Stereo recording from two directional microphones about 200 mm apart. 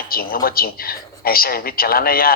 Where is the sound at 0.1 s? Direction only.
45° left (ahead or behind).